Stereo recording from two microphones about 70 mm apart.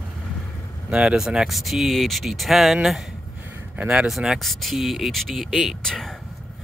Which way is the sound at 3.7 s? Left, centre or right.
Centre.